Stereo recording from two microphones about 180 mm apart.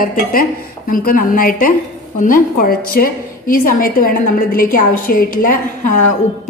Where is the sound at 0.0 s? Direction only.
50° left (ahead or behind).